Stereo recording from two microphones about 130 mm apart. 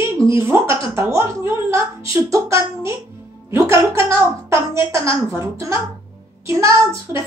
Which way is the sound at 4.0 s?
25° right (ahead or behind).